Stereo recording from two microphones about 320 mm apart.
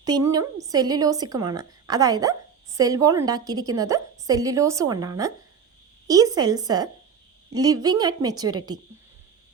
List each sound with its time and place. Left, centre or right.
0.0 s a woman's voice: centre